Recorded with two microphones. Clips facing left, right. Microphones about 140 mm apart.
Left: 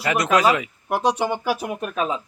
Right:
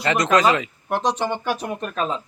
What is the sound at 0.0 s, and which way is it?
Speech, 5° left (ahead or behind).